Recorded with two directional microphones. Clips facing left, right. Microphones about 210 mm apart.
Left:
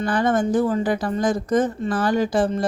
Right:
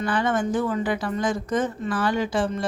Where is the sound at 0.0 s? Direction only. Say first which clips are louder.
Left 3 dB; 40° left (ahead or behind).